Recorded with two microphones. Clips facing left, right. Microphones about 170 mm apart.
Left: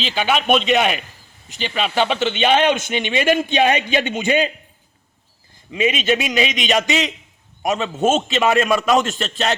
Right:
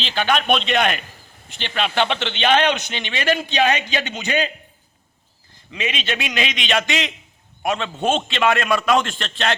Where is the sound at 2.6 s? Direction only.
50° left (ahead or behind).